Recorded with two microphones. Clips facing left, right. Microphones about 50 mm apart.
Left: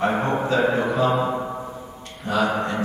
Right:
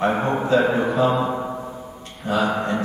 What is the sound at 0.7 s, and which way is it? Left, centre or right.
Speech, centre.